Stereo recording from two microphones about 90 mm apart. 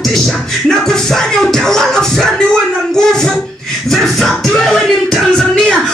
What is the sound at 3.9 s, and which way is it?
Music, centre (ahead or behind).